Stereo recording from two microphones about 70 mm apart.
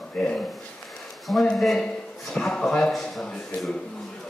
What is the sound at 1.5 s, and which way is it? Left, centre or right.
Speech, centre.